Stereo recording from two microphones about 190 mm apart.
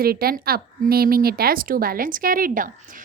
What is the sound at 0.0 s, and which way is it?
A woman's voice, 50° right (ahead or behind).